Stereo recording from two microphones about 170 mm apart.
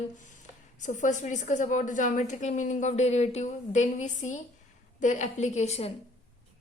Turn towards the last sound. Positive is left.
turn(degrees=40)  # may be behind; listen again after turning